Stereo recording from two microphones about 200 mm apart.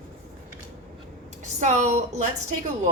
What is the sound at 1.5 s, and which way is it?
Speech, 35° right (ahead or behind).